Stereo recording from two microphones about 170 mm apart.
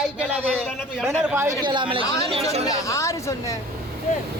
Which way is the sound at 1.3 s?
20° right (ahead or behind).